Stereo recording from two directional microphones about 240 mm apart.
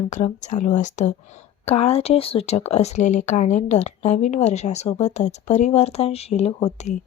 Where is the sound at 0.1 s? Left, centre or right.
Left.